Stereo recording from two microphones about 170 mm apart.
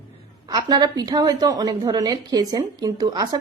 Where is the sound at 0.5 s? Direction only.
20° right (ahead or behind).